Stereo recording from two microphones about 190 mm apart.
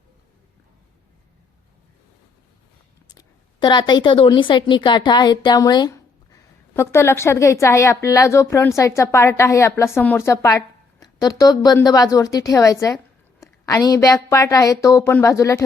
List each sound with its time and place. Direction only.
3.2 s a woman's voice: 25° left (ahead or behind)